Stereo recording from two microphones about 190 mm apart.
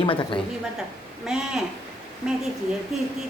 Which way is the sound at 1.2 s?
5° right (ahead or behind).